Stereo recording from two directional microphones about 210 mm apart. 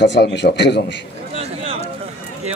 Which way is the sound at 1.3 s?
30° right (ahead or behind).